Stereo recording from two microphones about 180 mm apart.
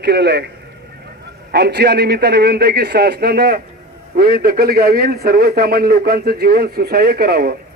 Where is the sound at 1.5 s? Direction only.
65° right (ahead or behind).